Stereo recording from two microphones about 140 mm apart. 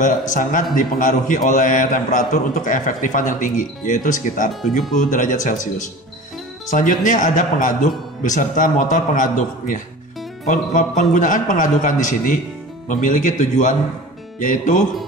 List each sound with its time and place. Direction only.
0.0 s a man's voice: 65° left (ahead or behind)